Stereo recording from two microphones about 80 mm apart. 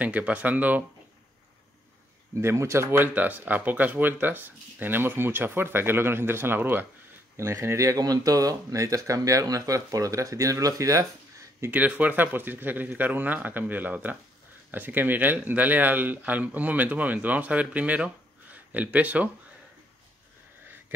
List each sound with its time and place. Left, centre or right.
0.0 s speech: centre
2.3 s speech: right
3.2 s speech: right
11.7 s speech: centre